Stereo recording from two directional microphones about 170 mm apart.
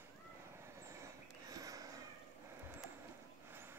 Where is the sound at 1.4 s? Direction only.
20° right (ahead or behind).